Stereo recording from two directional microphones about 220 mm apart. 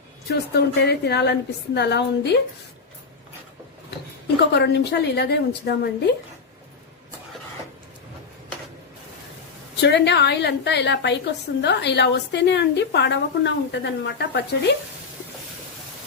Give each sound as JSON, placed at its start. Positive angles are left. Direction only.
{"t": 0.3, "sound": "a woman's voice", "side_deg": 45}
{"t": 4.4, "sound": "a woman's voice", "side_deg": 50}
{"t": 9.8, "sound": "a woman's voice", "side_deg": 50}